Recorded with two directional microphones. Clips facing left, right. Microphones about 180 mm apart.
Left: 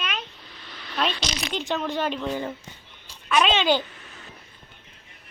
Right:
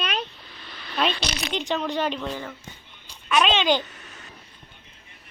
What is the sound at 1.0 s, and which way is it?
Speech, centre (ahead or behind).